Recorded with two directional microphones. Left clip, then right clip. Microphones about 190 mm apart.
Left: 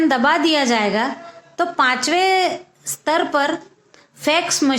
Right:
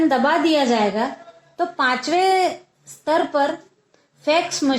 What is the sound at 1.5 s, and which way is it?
A woman's voice, 35° left (ahead or behind).